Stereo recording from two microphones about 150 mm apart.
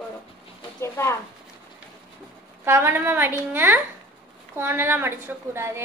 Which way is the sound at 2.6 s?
15° right (ahead or behind).